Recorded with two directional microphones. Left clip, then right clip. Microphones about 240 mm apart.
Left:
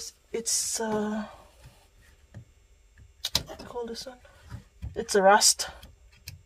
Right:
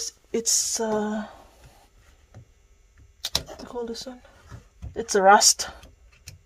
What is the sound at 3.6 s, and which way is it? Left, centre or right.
Speech, right.